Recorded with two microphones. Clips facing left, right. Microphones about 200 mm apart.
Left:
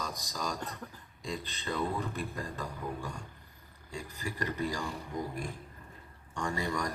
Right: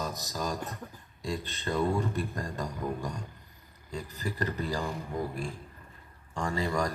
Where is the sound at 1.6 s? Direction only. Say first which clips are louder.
Right 5 dB; 45° right (ahead or behind).